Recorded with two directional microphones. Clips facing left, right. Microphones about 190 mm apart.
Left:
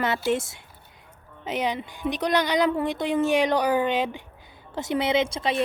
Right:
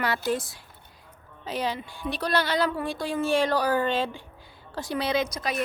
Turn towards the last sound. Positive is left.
turn(degrees=25)  # may be behind; listen again after turning